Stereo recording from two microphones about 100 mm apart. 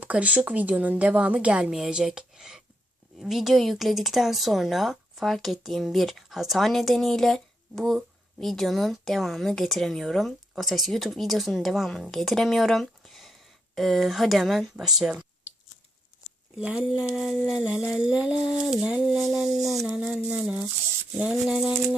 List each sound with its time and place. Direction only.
0.0 s a woman's voice: 15° right (ahead or behind)
15.1 s clicking: 15° right (ahead or behind)
16.6 s a woman's voice: 10° right (ahead or behind)